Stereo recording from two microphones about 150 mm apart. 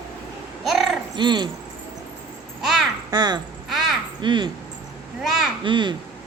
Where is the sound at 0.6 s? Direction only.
Centre (ahead or behind).